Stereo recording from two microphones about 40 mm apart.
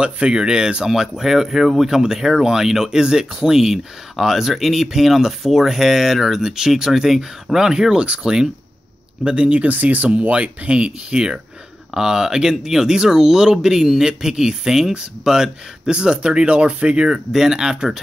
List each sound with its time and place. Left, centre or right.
0.0 s speech: right
17.3 s speech: centre